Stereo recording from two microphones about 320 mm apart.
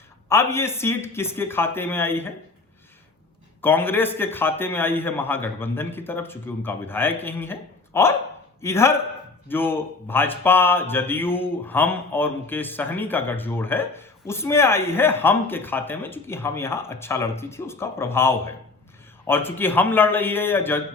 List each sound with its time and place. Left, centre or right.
0.3 s speech: centre
3.6 s speech: centre